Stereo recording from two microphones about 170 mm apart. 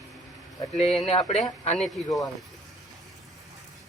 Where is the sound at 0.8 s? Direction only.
35° left (ahead or behind).